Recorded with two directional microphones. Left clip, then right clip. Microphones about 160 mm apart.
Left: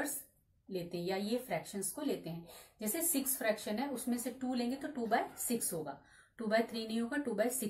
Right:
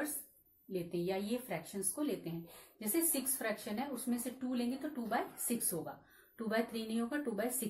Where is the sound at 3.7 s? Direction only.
25° right (ahead or behind).